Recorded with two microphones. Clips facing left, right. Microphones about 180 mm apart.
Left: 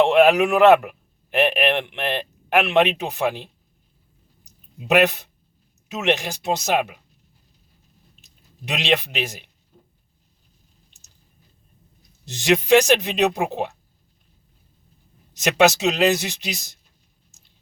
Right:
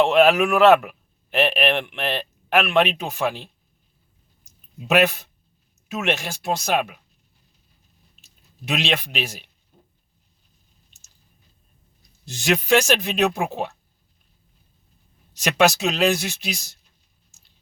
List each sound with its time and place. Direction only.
0.0 s speech: 15° left (ahead or behind)
4.4 s a sound: 15° left (ahead or behind)
5.9 s speech: 15° left (ahead or behind)
8.2 s speech: 15° left (ahead or behind)
12.2 s speech: 20° left (ahead or behind)
15.3 s speech: 20° left (ahead or behind)